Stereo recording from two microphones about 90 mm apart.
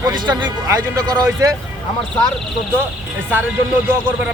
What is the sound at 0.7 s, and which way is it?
Speech, 40° right (ahead or behind).